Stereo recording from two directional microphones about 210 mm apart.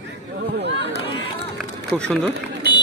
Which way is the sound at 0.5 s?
55° right (ahead or behind).